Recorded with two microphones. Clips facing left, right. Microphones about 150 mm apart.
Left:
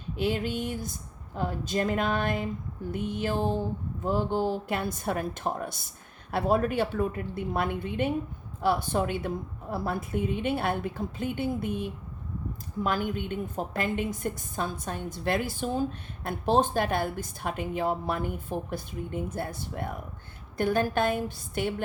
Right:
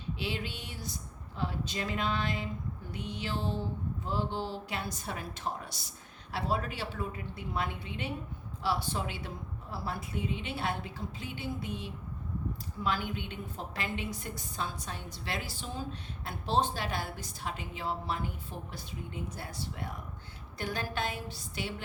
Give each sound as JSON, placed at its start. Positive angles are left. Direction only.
{"t": 0.2, "sound": "a woman's voice", "side_deg": 50}